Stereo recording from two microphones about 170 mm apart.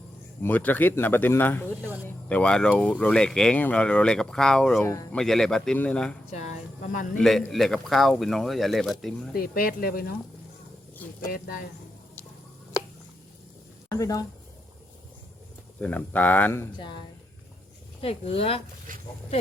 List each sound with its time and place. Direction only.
0.4 s speech: 10° left (ahead or behind)
6.3 s speech: 45° left (ahead or behind)
7.2 s speech: centre (ahead or behind)
9.3 s speech: 60° left (ahead or behind)
11.3 s speech: 60° left (ahead or behind)
13.9 s speech: 20° left (ahead or behind)
15.8 s speech: 10° left (ahead or behind)
18.0 s speech: 35° left (ahead or behind)
18.9 s speech: 50° right (ahead or behind)